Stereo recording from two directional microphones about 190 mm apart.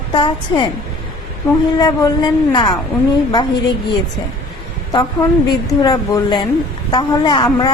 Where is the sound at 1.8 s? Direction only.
20° left (ahead or behind).